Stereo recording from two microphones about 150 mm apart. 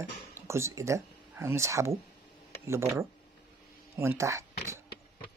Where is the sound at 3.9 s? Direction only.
20° right (ahead or behind).